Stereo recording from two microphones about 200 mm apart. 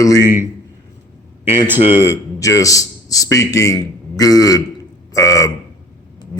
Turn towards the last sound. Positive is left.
turn(degrees=15)  # may be behind; listen again after turning